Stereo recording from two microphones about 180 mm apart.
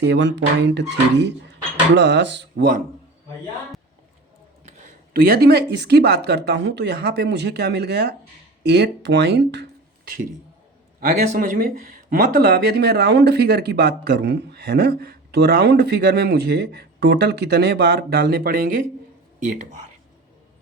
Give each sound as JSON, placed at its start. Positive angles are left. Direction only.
{"t": 0.0, "sound": "speech", "side_deg": -75}
{"t": 4.6, "sound": "speech", "side_deg": -50}
{"t": 11.3, "sound": "speech", "side_deg": -50}